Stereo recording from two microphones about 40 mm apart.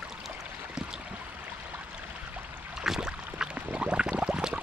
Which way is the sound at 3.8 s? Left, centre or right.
Right.